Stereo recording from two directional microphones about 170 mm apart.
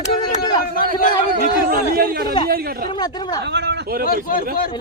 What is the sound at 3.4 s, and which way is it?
Speech, 90° right.